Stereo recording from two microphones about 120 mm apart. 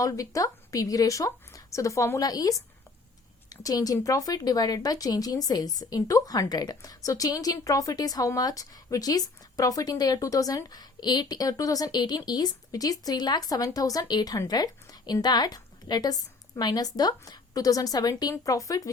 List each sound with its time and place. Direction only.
0.0 s a woman's voice: 30° left (ahead or behind)